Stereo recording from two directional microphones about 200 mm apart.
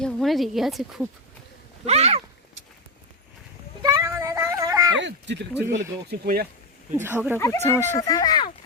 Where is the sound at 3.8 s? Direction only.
15° right (ahead or behind).